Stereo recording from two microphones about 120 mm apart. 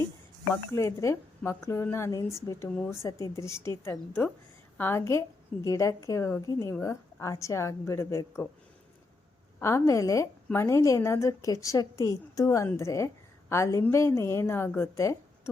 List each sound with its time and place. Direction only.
0.5 s a woman's voice: 25° left (ahead or behind)
9.6 s a woman's voice: 20° left (ahead or behind)